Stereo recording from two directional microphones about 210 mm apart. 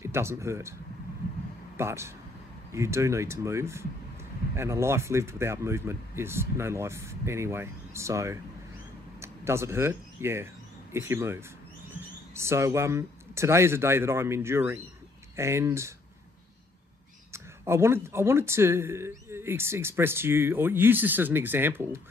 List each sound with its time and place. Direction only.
0.0 s speech: 10° right (ahead or behind)
1.8 s speech: 10° right (ahead or behind)
17.3 s speech: 10° right (ahead or behind)